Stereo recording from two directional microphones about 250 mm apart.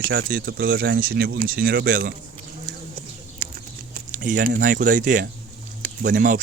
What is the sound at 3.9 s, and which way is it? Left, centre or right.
Speech, right.